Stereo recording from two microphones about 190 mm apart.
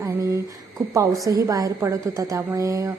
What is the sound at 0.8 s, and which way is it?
A woman's voice, 15° right (ahead or behind).